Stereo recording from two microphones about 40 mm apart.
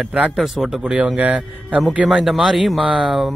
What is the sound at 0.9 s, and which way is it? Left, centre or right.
Speech, right.